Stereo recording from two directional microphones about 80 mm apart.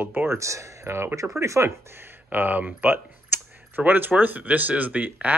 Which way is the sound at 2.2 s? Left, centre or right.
Right.